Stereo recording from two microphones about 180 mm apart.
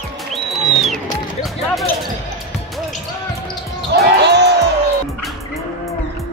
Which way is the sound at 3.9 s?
70° right (ahead or behind).